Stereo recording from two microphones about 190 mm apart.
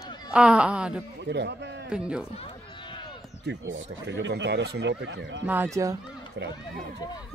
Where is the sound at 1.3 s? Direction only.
65° right (ahead or behind).